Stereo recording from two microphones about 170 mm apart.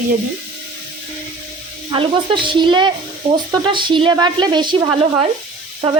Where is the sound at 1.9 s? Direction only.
30° right (ahead or behind).